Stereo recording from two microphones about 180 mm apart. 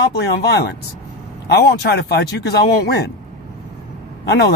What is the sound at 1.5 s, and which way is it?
Speech, 65° left (ahead or behind).